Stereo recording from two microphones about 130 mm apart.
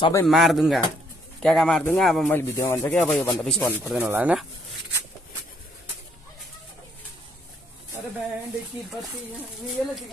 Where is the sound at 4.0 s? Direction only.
15° right (ahead or behind).